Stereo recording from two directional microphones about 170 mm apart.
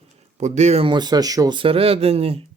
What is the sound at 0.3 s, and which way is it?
Speech, 40° right (ahead or behind).